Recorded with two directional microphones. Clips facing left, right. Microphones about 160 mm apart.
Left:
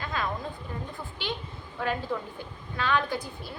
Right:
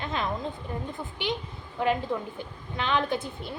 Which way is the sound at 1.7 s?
20° right (ahead or behind).